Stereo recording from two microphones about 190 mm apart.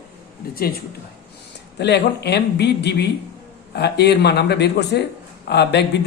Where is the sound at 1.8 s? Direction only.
60° left (ahead or behind).